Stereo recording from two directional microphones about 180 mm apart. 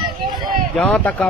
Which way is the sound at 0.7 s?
5° left (ahead or behind).